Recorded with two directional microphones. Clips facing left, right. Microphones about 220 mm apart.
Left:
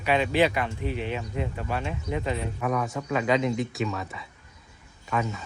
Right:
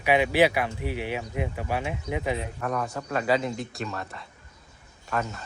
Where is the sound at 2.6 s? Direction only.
Centre (ahead or behind).